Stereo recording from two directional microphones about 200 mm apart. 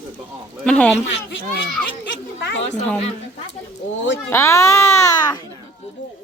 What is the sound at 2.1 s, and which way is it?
Speech, 65° left (ahead or behind).